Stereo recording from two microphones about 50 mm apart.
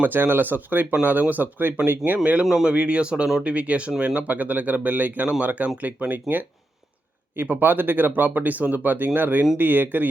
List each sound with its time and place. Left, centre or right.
0.0 s speech: right
2.1 s speech: right
2.4 s speech: centre
2.7 s speech: right